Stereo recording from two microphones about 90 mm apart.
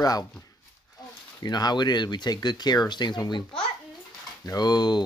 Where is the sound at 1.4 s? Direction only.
50° left (ahead or behind).